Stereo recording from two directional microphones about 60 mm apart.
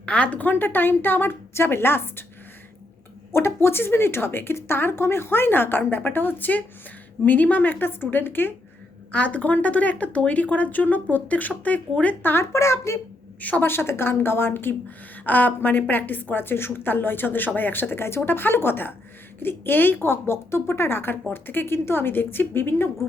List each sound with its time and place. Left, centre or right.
0.0 s a woman's voice: left
3.3 s a woman's voice: left
9.1 s speech: left
12.3 s speech: left
13.4 s speech: left
13.7 s a woman's voice: left